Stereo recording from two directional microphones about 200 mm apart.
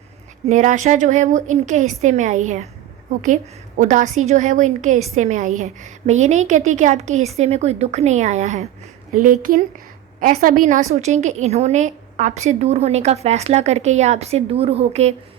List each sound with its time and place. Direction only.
0.4 s a woman's voice: 35° right (ahead or behind)
3.8 s a woman's voice: 40° right (ahead or behind)